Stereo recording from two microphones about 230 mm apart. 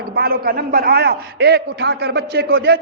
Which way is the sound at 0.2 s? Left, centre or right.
Right.